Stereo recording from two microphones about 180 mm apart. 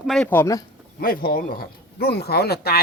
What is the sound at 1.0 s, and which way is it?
Speech, 55° left (ahead or behind).